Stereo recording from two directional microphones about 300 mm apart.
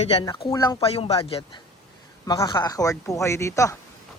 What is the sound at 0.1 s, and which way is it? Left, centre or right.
Speech, centre.